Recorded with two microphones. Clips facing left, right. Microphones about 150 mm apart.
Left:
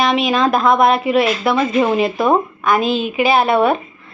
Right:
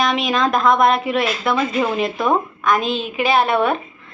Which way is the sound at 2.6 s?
5° left (ahead or behind).